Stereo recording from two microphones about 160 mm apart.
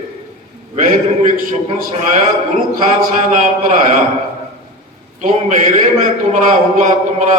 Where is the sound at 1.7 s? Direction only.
45° right (ahead or behind).